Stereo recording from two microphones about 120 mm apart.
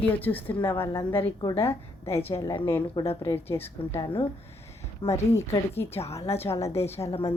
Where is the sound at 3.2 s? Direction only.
20° left (ahead or behind).